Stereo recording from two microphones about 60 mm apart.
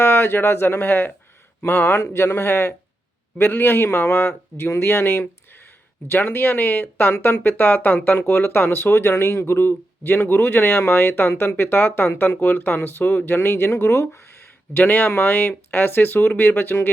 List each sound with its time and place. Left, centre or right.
0.0 s speech: left